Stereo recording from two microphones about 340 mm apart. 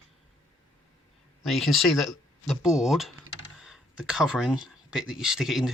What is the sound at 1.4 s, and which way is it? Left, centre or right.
Speech, centre.